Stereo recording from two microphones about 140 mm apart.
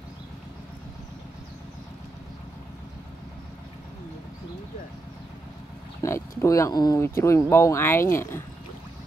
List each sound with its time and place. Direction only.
6.0 s speech: 25° left (ahead or behind)